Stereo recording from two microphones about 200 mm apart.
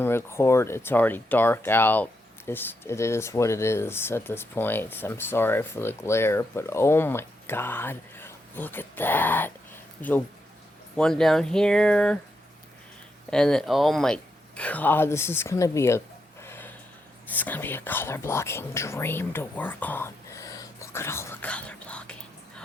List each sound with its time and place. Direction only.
0.0 s speech: 10° left (ahead or behind)
13.3 s speech: 5° left (ahead or behind)
16.4 s a sound: 10° left (ahead or behind)
17.3 s speech: 10° left (ahead or behind)